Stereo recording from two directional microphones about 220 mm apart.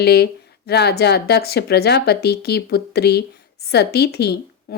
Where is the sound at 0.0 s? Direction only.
45° left (ahead or behind).